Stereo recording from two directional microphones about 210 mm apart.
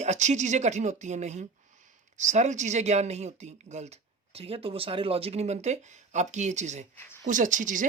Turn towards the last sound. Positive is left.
turn(degrees=-40)  # may be behind; listen again after turning